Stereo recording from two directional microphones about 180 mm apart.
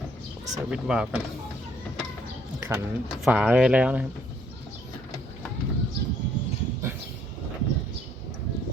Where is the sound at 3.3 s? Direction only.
5° right (ahead or behind).